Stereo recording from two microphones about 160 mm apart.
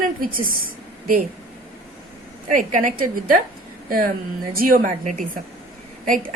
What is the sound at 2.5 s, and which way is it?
Speech, 55° right (ahead or behind).